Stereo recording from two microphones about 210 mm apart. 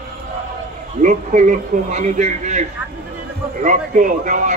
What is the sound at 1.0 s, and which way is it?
A man's voice, 35° right (ahead or behind).